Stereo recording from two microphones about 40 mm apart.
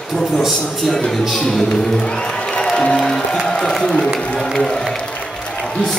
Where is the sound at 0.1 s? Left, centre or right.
Centre.